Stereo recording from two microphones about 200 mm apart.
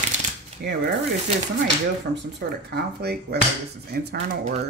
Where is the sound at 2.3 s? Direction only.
55° right (ahead or behind).